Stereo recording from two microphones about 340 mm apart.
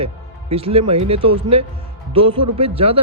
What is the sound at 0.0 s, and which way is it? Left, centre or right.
Speech, centre.